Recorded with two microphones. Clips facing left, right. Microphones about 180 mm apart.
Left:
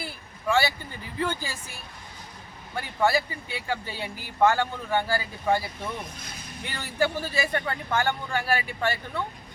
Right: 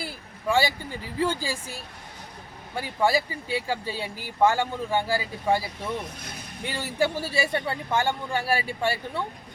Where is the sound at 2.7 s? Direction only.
10° right (ahead or behind).